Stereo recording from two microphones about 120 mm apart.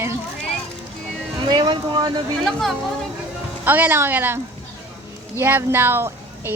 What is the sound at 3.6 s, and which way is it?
Speech, 15° right (ahead or behind).